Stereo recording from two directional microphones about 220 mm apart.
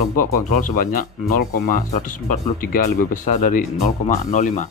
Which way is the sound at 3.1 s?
35° left (ahead or behind).